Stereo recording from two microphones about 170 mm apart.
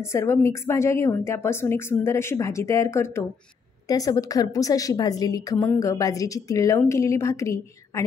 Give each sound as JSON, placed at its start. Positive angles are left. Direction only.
{"t": 0.0, "sound": "a woman's voice", "side_deg": 15}